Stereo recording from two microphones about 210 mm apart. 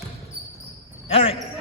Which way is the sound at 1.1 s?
25° left (ahead or behind).